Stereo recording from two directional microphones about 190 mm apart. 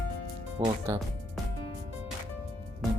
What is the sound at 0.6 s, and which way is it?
Speech, 20° right (ahead or behind).